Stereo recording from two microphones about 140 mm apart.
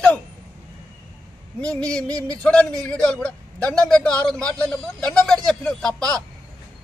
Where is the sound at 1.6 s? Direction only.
10° left (ahead or behind).